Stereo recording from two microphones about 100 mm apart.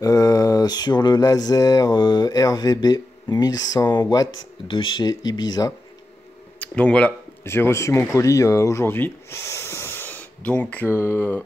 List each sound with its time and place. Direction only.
0.0 s speech: 35° left (ahead or behind); by 5.1 s 55° left (ahead or behind)
5.1 s speech: 40° left (ahead or behind)
6.6 s speech: 15° left (ahead or behind)
7.4 s speech: 25° left (ahead or behind)